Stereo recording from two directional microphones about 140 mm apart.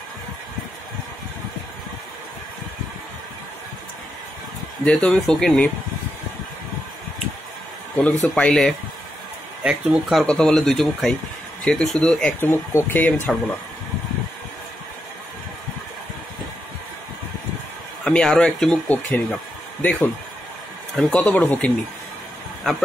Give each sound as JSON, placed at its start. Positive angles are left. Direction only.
{"t": 4.8, "sound": "speech", "side_deg": 5}
{"t": 8.2, "sound": "speech", "side_deg": 5}
{"t": 9.6, "sound": "speech", "side_deg": -5}
{"t": 10.2, "sound": "speech", "side_deg": 5}
{"t": 18.0, "sound": "speech", "side_deg": 5}